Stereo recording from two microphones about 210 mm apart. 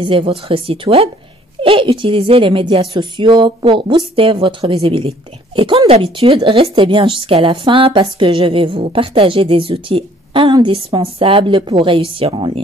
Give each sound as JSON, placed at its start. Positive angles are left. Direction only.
{"t": 0.0, "sound": "a woman's voice", "side_deg": -25}